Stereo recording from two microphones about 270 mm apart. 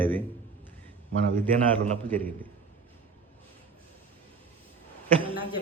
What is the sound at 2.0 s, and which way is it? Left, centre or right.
Speech, centre.